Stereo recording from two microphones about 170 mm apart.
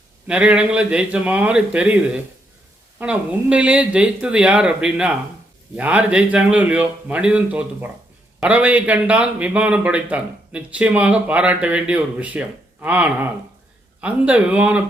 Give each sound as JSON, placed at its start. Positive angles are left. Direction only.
{"t": 0.3, "sound": "a man's voice", "side_deg": -5}